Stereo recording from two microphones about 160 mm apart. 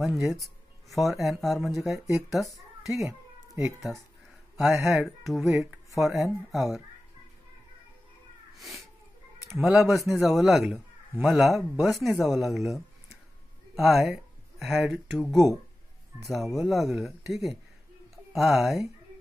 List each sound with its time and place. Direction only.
0.0 s a man's voice: centre (ahead or behind)
3.0 s a sound: 20° right (ahead or behind)
4.9 s a man's voice: centre (ahead or behind)
5.5 s speech: 15° right (ahead or behind)
5.9 s a man's voice: centre (ahead or behind)
8.5 s a man's voice: centre (ahead or behind)
13.7 s a man's voice: centre (ahead or behind)
18.1 s a sound: centre (ahead or behind)